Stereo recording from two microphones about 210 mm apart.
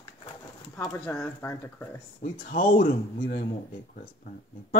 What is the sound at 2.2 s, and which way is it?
Speech, 40° left (ahead or behind).